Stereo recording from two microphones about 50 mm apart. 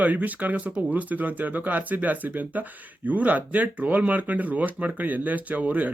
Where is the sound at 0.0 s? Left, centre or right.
Right.